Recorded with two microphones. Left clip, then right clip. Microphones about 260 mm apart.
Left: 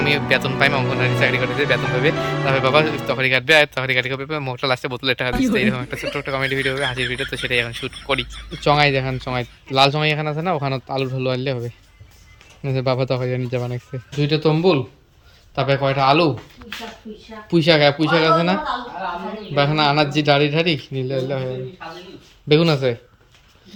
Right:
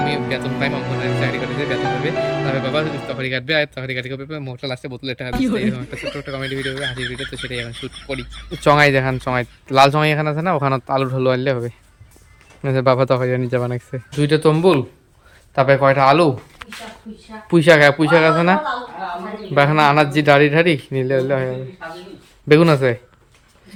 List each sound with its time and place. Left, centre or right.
0.0 s speech: centre
8.6 s speech: centre
17.5 s speech: centre